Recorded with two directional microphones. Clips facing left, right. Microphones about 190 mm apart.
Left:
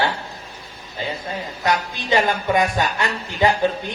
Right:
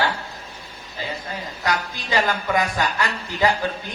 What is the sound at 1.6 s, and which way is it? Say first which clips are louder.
Speech: left 3 dB; 20° left (ahead or behind).